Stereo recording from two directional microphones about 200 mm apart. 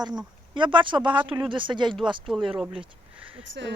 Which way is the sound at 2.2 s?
Centre (ahead or behind).